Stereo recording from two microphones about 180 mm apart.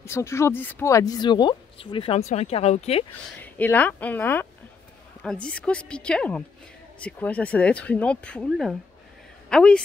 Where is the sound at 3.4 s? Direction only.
10° left (ahead or behind).